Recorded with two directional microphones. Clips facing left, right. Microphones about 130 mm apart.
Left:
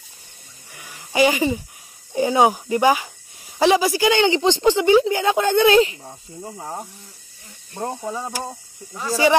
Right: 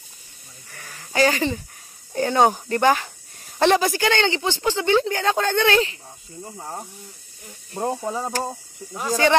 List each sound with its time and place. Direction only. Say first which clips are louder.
0.7 s speech: even; 15° left (ahead or behind)
7.7 s speech: right 2 dB; 15° right (ahead or behind)